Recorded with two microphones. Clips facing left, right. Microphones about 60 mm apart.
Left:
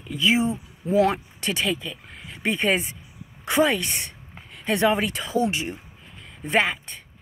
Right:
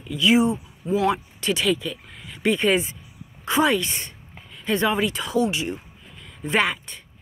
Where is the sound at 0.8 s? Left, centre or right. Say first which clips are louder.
Left 1 dB; left.